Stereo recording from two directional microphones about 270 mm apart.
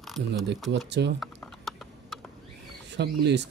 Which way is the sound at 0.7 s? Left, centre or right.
Right.